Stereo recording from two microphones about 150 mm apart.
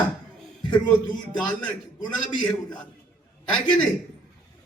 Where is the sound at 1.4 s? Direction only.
10° left (ahead or behind).